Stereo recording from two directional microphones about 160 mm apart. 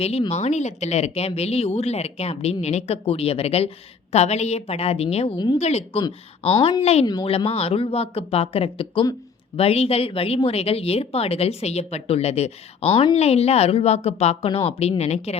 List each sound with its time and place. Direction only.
0.0 s a woman's voice: 40° left (ahead or behind)
6.0 s speech: 30° left (ahead or behind)